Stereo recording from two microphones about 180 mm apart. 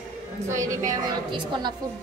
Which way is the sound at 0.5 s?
15° right (ahead or behind).